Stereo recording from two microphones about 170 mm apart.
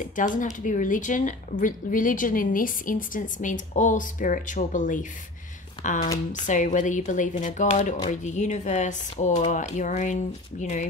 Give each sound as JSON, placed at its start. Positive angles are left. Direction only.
{"t": 0.1, "sound": "speech", "side_deg": 50}